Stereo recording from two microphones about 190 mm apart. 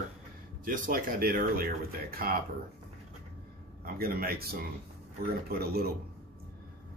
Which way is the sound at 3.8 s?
50° right (ahead or behind).